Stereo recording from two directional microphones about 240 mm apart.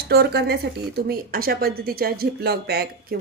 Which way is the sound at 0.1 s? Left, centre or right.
Right.